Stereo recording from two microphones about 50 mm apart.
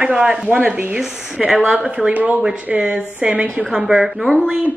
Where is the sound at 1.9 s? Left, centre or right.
Right.